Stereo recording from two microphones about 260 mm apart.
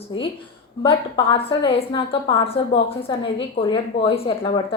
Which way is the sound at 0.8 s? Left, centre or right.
Centre.